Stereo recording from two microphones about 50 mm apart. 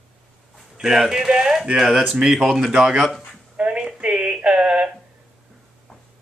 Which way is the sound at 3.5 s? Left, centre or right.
Right.